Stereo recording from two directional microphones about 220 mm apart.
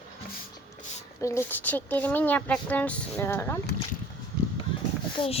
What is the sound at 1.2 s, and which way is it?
Speech, 10° left (ahead or behind).